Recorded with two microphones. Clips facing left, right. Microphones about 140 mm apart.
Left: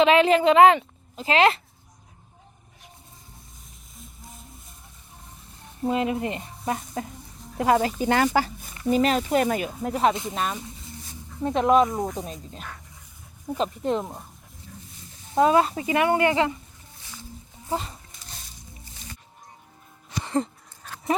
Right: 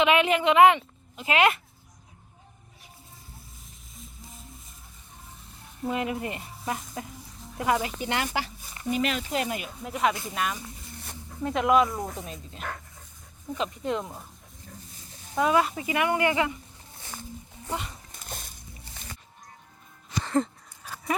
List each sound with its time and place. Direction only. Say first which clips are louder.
0.0 s speech: left 5 dB; 35° left (ahead or behind)
5.8 s speech: left 5 dB; 25° left (ahead or behind)
15.4 s speech: left 4 dB; 30° left (ahead or behind)
18.2 s music: right 5 dB; 50° right (ahead or behind)
21.1 s speech: left 4 dB; 25° left (ahead or behind)